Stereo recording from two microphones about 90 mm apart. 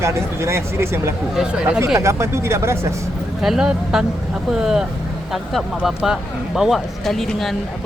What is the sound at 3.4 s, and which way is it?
Speech, 5° right (ahead or behind).